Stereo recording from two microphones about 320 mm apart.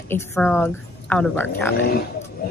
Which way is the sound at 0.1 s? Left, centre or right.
Centre.